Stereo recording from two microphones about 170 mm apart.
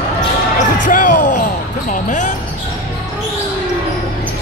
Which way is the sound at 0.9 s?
55° left (ahead or behind).